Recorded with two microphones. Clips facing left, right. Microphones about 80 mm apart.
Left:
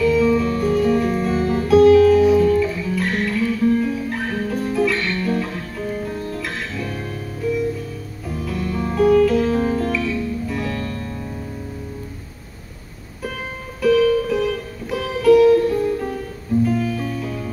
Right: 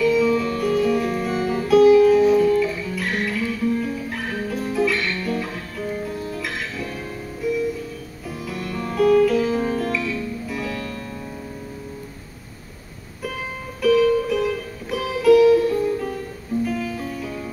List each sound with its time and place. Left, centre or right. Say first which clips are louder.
0.0 s music: left 2 dB; centre
2.3 s guitar: left 1 dB; centre
5.4 s music: left 2 dB; centre
8.3 s music: left 4 dB; centre
10.8 s music: left 3 dB; left
13.7 s music: left 1 dB; centre